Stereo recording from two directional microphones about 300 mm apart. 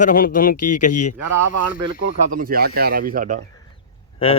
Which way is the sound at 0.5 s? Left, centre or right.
Left.